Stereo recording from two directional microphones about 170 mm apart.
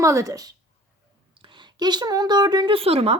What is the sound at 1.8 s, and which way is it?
Speech, 25° right (ahead or behind).